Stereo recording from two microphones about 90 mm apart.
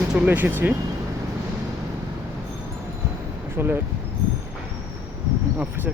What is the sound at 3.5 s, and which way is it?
Speech, 25° right (ahead or behind).